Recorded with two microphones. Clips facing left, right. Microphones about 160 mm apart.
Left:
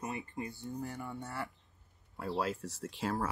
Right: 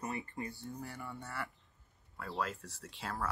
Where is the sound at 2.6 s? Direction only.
40° left (ahead or behind).